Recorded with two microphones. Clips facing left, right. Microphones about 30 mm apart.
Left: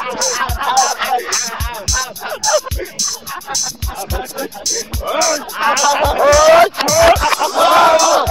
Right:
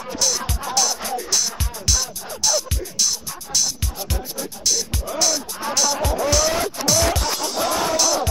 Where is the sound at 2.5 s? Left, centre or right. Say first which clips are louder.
Left 7 dB; centre.